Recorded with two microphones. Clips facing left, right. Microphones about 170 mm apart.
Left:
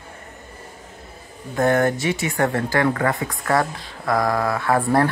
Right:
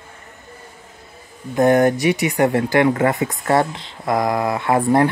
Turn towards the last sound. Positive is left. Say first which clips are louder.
# right 3 dB
turn(degrees=-20)  # may be behind; listen again after turning